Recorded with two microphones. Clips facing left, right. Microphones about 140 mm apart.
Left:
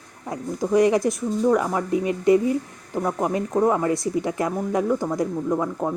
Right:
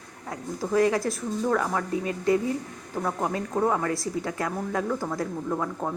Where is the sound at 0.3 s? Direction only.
20° left (ahead or behind).